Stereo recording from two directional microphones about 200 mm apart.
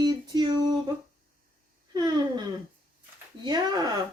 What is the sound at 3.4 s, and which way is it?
Speech, 20° right (ahead or behind).